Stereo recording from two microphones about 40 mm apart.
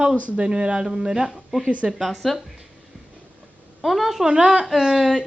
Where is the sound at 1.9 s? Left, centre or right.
Centre.